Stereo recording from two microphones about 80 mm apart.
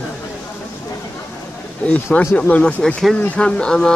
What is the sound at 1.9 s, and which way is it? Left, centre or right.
Speech, centre.